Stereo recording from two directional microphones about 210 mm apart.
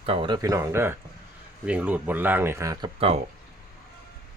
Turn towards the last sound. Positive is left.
turn(degrees=-25)  # may be behind; listen again after turning